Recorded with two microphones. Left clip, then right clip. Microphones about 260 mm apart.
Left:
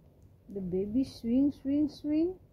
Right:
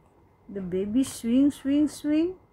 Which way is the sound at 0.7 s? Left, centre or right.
Right.